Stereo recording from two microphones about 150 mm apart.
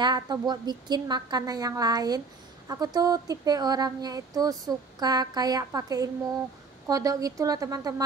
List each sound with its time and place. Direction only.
0.0 s speech: 30° right (ahead or behind)